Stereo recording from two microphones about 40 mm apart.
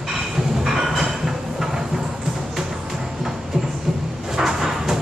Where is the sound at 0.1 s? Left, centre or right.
Centre.